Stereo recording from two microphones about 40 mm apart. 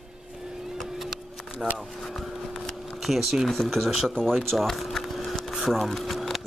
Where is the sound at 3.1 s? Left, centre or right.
Centre.